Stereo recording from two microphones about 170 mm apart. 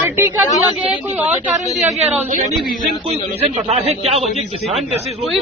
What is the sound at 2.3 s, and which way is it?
Speech, 40° right (ahead or behind).